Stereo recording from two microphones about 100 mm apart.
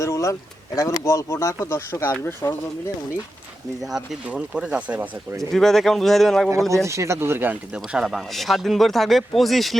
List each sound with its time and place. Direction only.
0.0 s speech: 35° left (ahead or behind)
3.8 s speech: 5° right (ahead or behind)
5.4 s speech: 5° left (ahead or behind)
6.8 s speech: 30° right (ahead or behind)
7.8 s speech: 5° right (ahead or behind)